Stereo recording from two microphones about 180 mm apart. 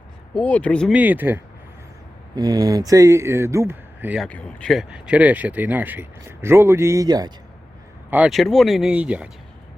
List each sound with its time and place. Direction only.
0.3 s speech: 10° left (ahead or behind)
0.9 s speech: 10° right (ahead or behind)
2.3 s speech: 20° right (ahead or behind)
4.3 s speech: 5° left (ahead or behind); by 7.3 s 20° right (ahead or behind)
8.1 s speech: 5° right (ahead or behind)